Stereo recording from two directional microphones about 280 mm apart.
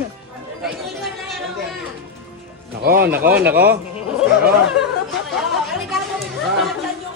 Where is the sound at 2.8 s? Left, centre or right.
Right.